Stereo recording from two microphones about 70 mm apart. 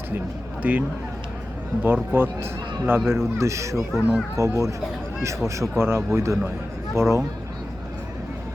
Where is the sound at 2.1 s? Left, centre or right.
Right.